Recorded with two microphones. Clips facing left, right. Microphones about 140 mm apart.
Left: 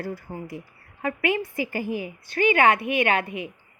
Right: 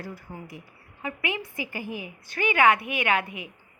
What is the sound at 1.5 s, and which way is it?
A woman's voice, 35° left (ahead or behind).